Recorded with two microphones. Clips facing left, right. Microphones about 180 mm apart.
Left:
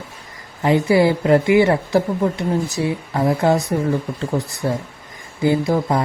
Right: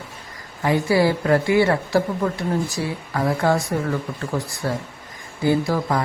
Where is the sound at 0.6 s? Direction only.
20° left (ahead or behind).